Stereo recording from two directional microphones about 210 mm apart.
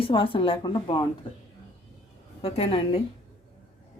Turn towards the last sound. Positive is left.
turn(degrees=25)  # may be behind; listen again after turning